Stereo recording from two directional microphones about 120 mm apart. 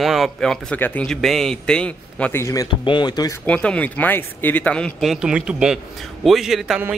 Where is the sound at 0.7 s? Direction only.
15° left (ahead or behind).